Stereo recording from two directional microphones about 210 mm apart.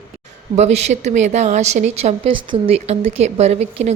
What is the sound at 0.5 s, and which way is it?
A woman's voice, 30° right (ahead or behind).